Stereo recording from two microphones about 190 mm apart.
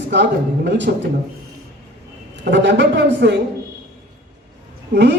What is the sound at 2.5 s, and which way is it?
Speech, 65° right (ahead or behind).